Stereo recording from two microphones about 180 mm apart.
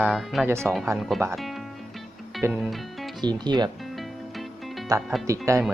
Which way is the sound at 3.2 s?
25° right (ahead or behind).